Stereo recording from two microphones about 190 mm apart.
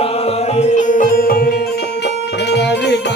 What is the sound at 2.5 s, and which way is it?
Music, 65° left (ahead or behind).